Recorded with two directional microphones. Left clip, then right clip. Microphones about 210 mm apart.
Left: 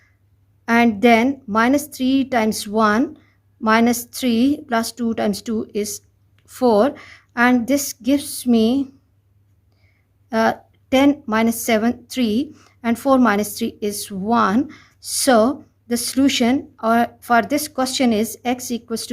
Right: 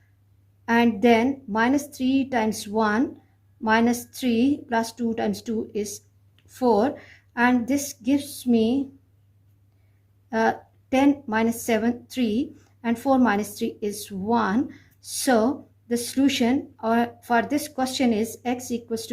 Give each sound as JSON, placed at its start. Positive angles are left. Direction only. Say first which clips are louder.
{"t": 0.6, "sound": "speech", "louder": "left 5 dB", "side_deg": 40}
{"t": 10.2, "sound": "speech", "louder": "left 4 dB", "side_deg": 40}